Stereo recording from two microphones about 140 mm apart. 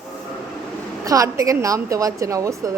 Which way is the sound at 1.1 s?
25° right (ahead or behind).